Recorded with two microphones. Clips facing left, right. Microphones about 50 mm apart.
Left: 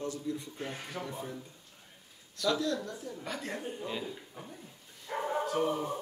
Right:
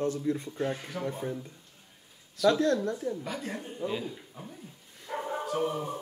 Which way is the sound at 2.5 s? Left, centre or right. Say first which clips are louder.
Right 6 dB; right.